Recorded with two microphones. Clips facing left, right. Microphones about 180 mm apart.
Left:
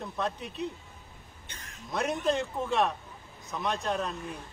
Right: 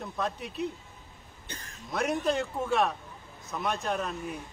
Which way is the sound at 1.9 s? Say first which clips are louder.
Even; centre (ahead or behind).